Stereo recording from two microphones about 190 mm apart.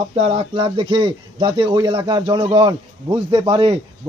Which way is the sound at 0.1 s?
30° right (ahead or behind).